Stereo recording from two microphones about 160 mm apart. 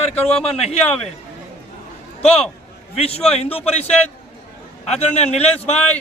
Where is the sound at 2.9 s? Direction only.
40° left (ahead or behind).